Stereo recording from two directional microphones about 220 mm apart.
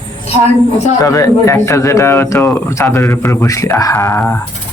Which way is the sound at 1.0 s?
15° left (ahead or behind).